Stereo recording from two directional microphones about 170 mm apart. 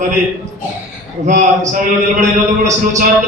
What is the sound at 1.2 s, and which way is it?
A man's voice, 45° right (ahead or behind).